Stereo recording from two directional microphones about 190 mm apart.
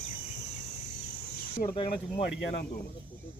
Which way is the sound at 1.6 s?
25° left (ahead or behind).